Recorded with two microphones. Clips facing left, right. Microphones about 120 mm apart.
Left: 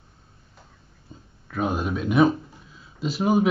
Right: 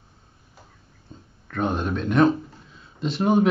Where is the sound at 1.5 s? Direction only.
5° left (ahead or behind).